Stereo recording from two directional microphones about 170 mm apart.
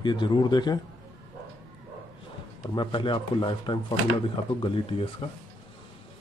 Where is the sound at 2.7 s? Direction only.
25° left (ahead or behind).